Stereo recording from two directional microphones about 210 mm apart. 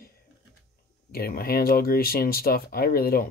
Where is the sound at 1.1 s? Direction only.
45° left (ahead or behind).